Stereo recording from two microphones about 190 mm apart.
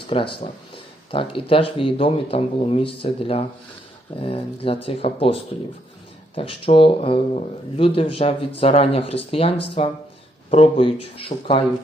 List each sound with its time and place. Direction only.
0.1 s speech: 30° left (ahead or behind)